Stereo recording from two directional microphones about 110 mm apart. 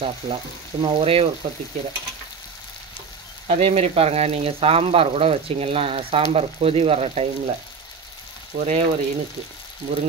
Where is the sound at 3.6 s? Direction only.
60° right (ahead or behind).